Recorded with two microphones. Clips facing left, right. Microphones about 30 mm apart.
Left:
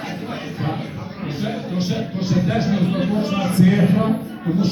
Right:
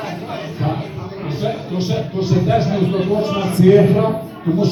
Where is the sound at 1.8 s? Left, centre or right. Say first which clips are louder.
Right 6 dB; right.